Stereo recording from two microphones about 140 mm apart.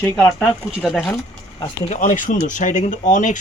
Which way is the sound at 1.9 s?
60° left (ahead or behind).